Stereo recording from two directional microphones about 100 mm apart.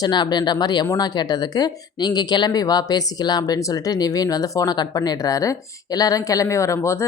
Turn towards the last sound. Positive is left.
turn(degrees=30)  # may be behind; listen again after turning